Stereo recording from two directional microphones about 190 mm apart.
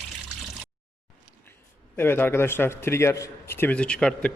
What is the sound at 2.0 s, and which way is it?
A man's voice, 10° left (ahead or behind).